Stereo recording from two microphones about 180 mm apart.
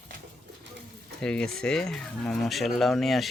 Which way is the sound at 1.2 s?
5° left (ahead or behind).